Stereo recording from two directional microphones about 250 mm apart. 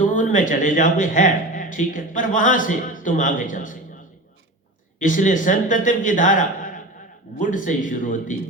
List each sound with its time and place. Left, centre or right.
0.0 s a man's voice: left
4.9 s a man's voice: left